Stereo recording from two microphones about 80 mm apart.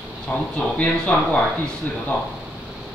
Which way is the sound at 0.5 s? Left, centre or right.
Centre.